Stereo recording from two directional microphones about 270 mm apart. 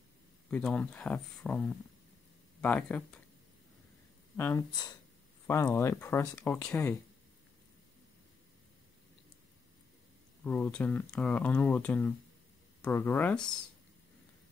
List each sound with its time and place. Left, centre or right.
0.5 s speech: centre
4.4 s speech: centre
10.4 s speech: centre